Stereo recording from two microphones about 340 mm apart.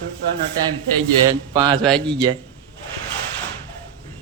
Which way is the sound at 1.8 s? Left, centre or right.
Centre.